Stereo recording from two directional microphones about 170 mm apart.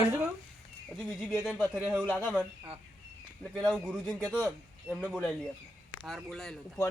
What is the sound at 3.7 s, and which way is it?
Speech, 5° right (ahead or behind).